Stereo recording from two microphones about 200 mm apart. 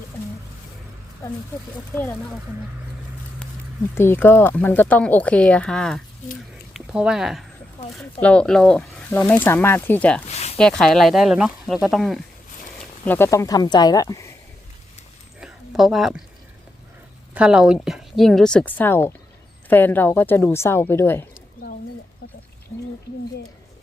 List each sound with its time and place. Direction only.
2.0 s speech: 10° left (ahead or behind)
3.9 s speech: 10° left (ahead or behind)
10.3 s a sound: 30° left (ahead or behind)
10.6 s speech: 5° left (ahead or behind)
13.1 s speech: 10° left (ahead or behind)
15.4 s a sound: centre (ahead or behind)
17.3 s speech: 5° right (ahead or behind)
22.7 s speech: 15° left (ahead or behind)